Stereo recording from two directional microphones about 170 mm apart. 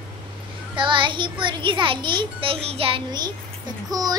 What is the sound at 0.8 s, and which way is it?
A child's voice, 30° right (ahead or behind).